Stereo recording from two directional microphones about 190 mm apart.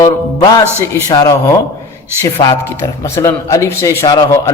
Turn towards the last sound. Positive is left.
turn(degrees=20)  # may be behind; listen again after turning